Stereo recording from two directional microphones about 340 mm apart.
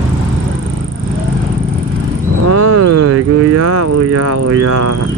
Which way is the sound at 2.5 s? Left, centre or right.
Right.